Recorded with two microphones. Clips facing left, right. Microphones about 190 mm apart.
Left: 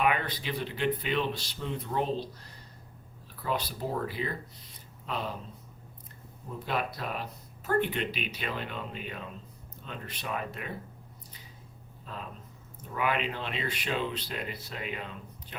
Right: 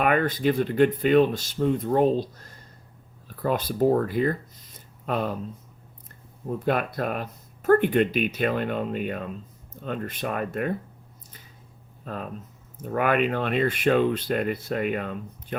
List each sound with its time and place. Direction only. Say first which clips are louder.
0.0 s speech: right 7 dB; 50° right (ahead or behind)
6.7 s speech: right 7 dB; 55° right (ahead or behind)
12.0 s speech: right 8 dB; 55° right (ahead or behind)